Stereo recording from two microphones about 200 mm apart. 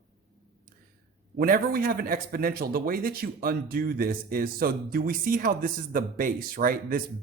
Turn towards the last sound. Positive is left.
turn(degrees=-45)  # may be behind; listen again after turning